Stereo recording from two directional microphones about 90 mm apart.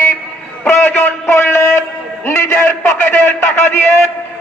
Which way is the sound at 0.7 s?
25° left (ahead or behind).